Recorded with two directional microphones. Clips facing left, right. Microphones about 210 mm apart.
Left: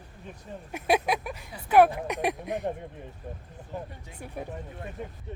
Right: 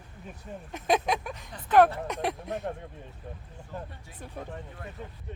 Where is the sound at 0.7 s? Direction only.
10° left (ahead or behind).